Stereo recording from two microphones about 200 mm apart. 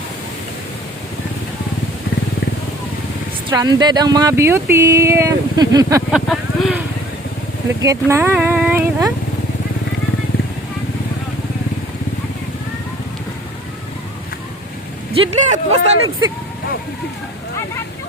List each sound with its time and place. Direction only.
3.5 s speech: 20° right (ahead or behind)
6.1 s speech: centre (ahead or behind)
7.8 s speech: 15° right (ahead or behind)
15.1 s speech: 30° right (ahead or behind)